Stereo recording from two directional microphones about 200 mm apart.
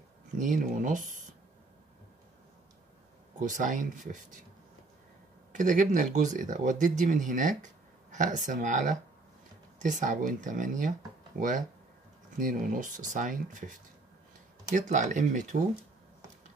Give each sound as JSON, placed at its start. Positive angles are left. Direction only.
{"t": 0.4, "sound": "speech", "side_deg": -40}
{"t": 3.3, "sound": "speech", "side_deg": -40}
{"t": 5.5, "sound": "speech", "side_deg": -40}
{"t": 12.4, "sound": "speech", "side_deg": -40}